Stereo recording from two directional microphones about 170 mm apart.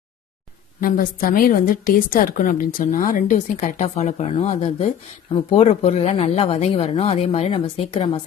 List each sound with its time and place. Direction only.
0.8 s a woman's voice: 55° left (ahead or behind); by 8.2 s 35° left (ahead or behind)